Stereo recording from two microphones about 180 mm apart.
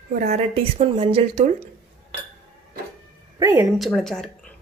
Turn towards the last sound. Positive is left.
turn(degrees=0)  # may be behind; listen again after turning